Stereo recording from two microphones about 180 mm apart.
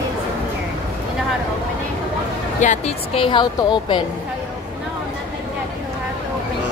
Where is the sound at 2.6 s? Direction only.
40° left (ahead or behind).